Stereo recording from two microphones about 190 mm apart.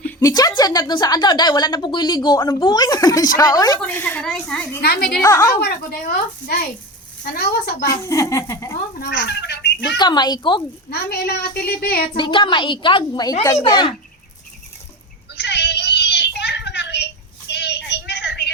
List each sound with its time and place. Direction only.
0.2 s a woman's voice: 20° left (ahead or behind)
3.8 s a woman's voice: 10° left (ahead or behind)
4.8 s a woman's voice: 55° left (ahead or behind)
5.2 s a woman's voice: 15° left (ahead or behind)
5.5 s a woman's voice: 55° left (ahead or behind)
7.3 s speech: 55° left (ahead or behind)
7.9 s a woman's voice: 15° left (ahead or behind)
9.0 s fowl: 60° left (ahead or behind)
10.0 s a woman's voice: 20° left (ahead or behind)
10.9 s a woman's voice: 55° left (ahead or behind)
12.1 s a woman's voice: 25° left (ahead or behind)
15.4 s a sound: 65° left (ahead or behind)